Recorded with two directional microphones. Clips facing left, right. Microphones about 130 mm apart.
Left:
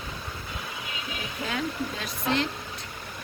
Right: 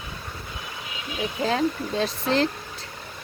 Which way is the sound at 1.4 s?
30° right (ahead or behind).